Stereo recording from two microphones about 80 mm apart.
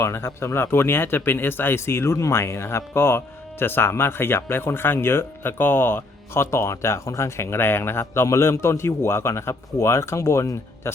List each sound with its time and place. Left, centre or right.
0.0 s speech: left